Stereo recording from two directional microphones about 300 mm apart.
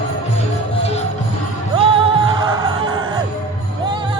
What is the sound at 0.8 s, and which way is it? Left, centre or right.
Music, left.